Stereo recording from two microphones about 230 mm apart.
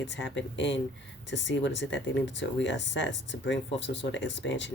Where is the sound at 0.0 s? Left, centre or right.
Left.